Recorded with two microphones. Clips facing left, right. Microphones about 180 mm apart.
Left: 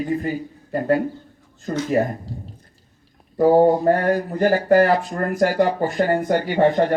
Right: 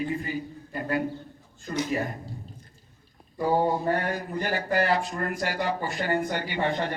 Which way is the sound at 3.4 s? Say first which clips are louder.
Left 10 dB; 45° left (ahead or behind).